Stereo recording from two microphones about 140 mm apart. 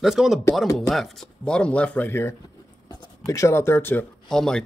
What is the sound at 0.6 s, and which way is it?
Speech, 20° left (ahead or behind).